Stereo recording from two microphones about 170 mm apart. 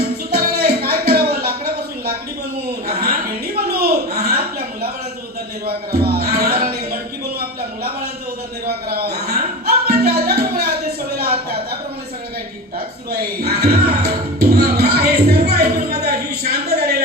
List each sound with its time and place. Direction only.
0.0 s music: 65° right (ahead or behind)
2.8 s a sound: 65° right (ahead or behind)
5.6 s music: 65° right (ahead or behind)
8.6 s music: 65° right (ahead or behind)
11.2 s a sound: 65° right (ahead or behind)
13.1 s music: 65° right (ahead or behind)